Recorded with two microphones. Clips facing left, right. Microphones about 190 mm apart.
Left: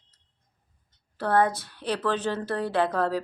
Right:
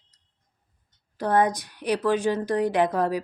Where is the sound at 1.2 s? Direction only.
15° right (ahead or behind).